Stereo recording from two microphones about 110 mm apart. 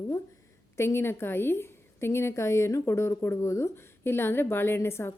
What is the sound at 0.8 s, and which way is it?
A woman's voice, 20° left (ahead or behind).